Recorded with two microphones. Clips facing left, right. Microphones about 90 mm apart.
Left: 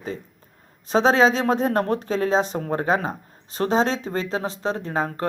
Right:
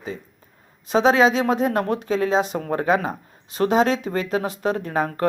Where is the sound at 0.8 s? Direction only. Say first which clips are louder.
Right 1 dB; 35° left (ahead or behind).